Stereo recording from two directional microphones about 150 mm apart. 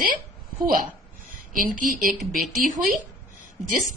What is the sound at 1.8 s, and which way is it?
Speech, 65° right (ahead or behind).